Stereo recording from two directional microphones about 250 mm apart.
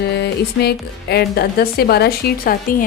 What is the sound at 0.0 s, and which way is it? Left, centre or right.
Speech, left.